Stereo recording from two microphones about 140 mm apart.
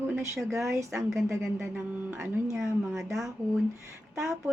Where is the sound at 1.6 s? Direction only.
15° right (ahead or behind).